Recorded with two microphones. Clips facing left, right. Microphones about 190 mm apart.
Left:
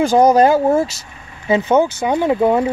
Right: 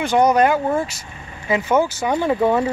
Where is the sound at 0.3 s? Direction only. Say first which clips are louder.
Left 5 dB; 35° left (ahead or behind).